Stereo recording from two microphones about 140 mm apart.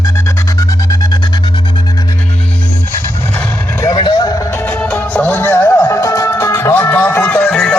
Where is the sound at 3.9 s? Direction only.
30° left (ahead or behind).